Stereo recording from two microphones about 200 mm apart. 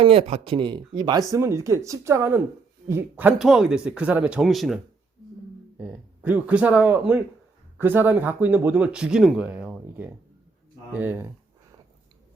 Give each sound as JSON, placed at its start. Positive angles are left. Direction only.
{"t": 0.0, "sound": "speech", "side_deg": -30}